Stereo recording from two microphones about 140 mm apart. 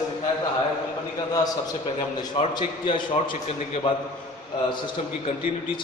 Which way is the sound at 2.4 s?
45° left (ahead or behind).